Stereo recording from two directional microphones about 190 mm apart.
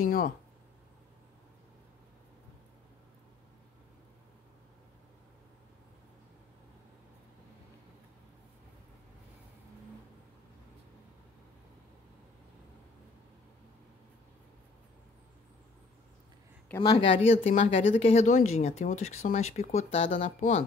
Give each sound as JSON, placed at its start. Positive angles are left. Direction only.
{"t": 0.0, "sound": "speech", "side_deg": 45}
{"t": 16.8, "sound": "speech", "side_deg": 25}